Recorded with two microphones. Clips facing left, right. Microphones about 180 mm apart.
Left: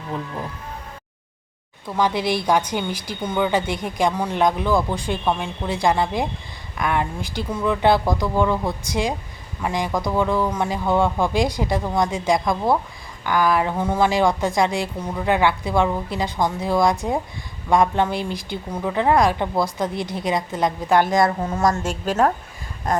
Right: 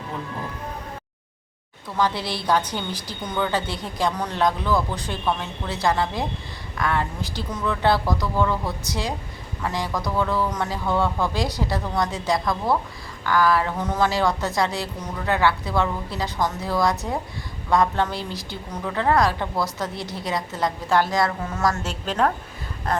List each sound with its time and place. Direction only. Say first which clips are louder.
2.0 s a woman's voice: left 4 dB; 15° left (ahead or behind)
22.0 s a woman's voice: left 3 dB; 10° left (ahead or behind)